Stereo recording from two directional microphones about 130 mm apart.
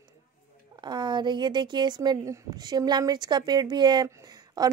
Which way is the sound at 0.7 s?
35° right (ahead or behind).